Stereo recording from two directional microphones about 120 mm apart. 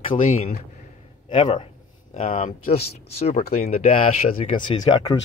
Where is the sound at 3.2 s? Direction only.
60° left (ahead or behind).